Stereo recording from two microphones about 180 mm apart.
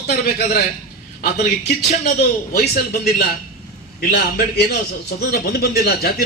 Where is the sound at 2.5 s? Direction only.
60° left (ahead or behind).